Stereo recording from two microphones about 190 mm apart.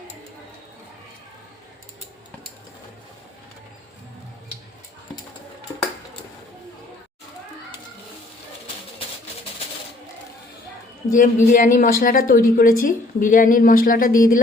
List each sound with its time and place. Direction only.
11.1 s a woman's voice: 45° left (ahead or behind)